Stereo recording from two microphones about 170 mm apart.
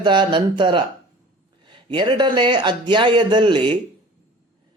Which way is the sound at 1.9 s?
30° right (ahead or behind).